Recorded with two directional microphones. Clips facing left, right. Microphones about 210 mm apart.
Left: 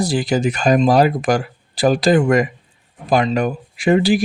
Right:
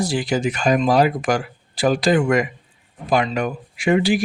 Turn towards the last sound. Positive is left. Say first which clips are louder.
# left 3 dB
turn(degrees=35)  # may be behind; listen again after turning